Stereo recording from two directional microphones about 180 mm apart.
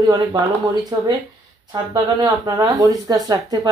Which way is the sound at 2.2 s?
20° right (ahead or behind).